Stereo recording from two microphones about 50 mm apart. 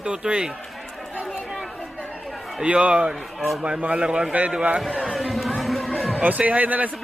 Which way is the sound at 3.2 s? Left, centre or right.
Centre.